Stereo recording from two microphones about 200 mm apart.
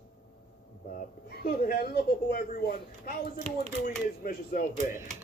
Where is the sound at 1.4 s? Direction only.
50° left (ahead or behind).